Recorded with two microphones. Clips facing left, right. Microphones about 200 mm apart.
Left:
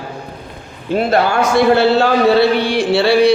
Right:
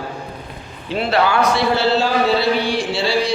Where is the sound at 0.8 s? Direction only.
45° left (ahead or behind).